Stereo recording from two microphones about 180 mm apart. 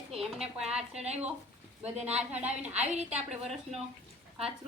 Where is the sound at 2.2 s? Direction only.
5° right (ahead or behind).